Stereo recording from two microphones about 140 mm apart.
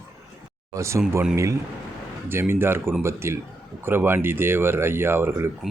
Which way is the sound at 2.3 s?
15° right (ahead or behind).